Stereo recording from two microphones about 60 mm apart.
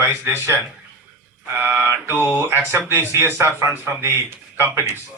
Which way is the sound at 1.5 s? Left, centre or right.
Right.